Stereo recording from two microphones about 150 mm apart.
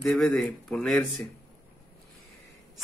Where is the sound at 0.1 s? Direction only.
5° left (ahead or behind).